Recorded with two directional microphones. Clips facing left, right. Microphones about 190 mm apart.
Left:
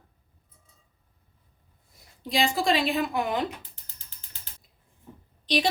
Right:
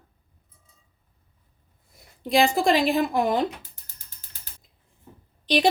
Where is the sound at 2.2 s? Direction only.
55° right (ahead or behind).